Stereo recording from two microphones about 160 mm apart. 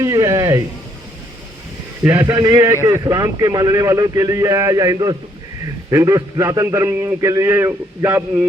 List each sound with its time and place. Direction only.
0.0 s speech: 20° right (ahead or behind)
2.0 s a man's voice: 20° right (ahead or behind)